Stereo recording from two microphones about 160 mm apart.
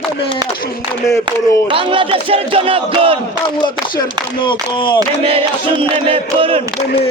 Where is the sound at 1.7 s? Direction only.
35° right (ahead or behind).